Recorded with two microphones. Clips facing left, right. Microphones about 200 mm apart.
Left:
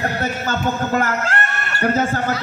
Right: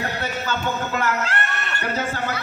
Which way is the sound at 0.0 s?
45° left (ahead or behind).